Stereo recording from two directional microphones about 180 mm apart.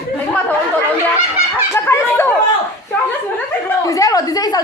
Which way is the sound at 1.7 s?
15° left (ahead or behind).